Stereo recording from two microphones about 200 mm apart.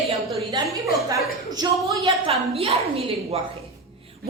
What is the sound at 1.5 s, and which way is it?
Speech, 20° right (ahead or behind).